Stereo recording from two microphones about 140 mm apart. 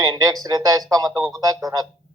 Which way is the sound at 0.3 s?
25° right (ahead or behind).